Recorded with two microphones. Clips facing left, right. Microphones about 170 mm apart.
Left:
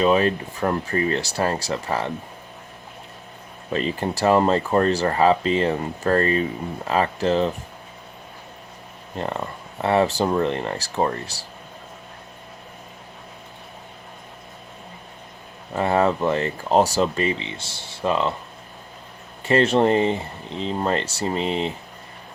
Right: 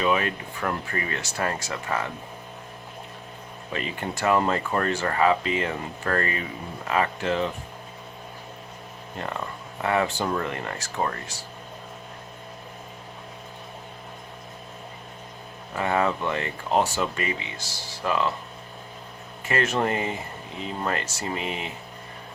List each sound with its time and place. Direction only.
0.0 s speech: 35° left (ahead or behind)
3.7 s speech: 35° left (ahead or behind)
9.8 s speech: 30° left (ahead or behind)
15.7 s speech: 35° left (ahead or behind)
19.5 s speech: 30° left (ahead or behind)